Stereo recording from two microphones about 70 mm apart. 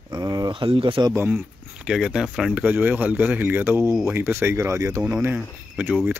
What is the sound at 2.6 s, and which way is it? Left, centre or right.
Speech, right.